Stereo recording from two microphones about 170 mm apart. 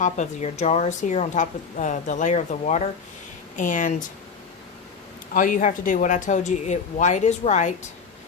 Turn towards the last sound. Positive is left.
turn(degrees=45)  # may be behind; listen again after turning